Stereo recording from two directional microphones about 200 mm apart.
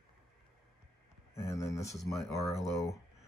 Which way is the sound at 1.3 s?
15° left (ahead or behind).